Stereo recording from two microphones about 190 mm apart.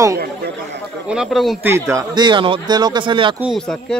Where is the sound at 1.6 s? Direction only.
15° right (ahead or behind).